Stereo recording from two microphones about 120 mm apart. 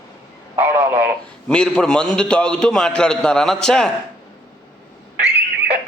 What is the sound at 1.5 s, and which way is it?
A man's voice, 5° left (ahead or behind).